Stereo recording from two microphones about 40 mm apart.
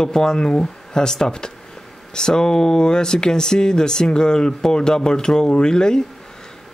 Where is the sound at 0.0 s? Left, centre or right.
Centre.